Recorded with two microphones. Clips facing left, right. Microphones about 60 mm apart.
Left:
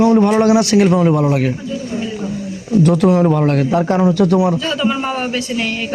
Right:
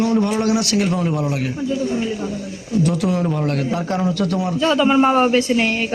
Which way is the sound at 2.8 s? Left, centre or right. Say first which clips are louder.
Left 7 dB; left.